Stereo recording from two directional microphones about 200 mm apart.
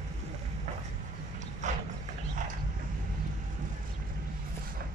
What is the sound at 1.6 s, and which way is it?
Clip-clop, 35° right (ahead or behind).